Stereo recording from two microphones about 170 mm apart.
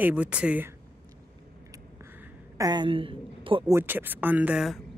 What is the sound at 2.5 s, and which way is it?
A woman's voice, 25° right (ahead or behind).